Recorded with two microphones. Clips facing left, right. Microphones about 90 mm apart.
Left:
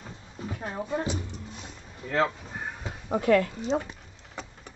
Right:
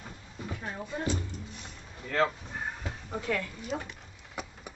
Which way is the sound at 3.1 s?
65° left (ahead or behind).